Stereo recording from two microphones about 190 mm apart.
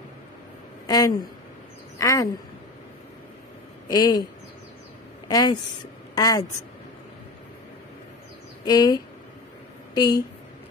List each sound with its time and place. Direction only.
0.8 s a woman's voice: 20° left (ahead or behind)
3.9 s speech: 20° left (ahead or behind)
5.3 s a woman's voice: 20° left (ahead or behind)
8.6 s speech: 20° left (ahead or behind)